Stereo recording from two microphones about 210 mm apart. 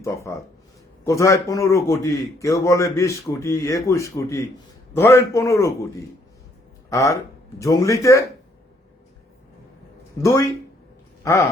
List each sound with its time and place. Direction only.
0.0 s a man's voice: 15° left (ahead or behind)
11.2 s a man's voice: 15° left (ahead or behind)